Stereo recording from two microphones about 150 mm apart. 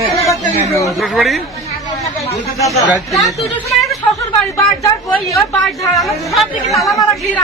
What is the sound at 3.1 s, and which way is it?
Speech, centre (ahead or behind).